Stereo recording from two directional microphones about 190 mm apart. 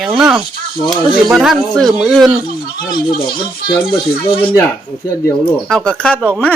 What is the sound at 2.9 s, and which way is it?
Speech, 25° left (ahead or behind).